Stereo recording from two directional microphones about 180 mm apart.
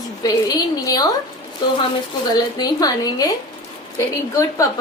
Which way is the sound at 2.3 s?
20° left (ahead or behind).